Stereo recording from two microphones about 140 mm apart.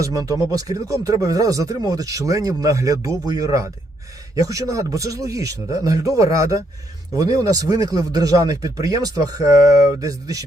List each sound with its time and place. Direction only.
0.0 s speech: 25° right (ahead or behind)